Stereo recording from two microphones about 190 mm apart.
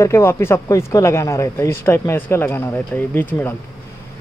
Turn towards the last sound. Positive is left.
turn(degrees=10)  # may be behind; listen again after turning